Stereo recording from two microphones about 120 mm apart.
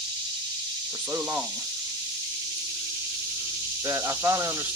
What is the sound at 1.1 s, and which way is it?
Speech, 20° right (ahead or behind).